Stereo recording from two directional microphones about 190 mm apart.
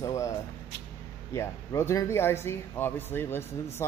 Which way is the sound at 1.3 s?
15° left (ahead or behind).